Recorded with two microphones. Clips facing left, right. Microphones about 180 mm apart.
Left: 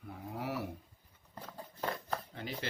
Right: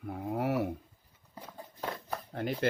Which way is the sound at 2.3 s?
55° right (ahead or behind).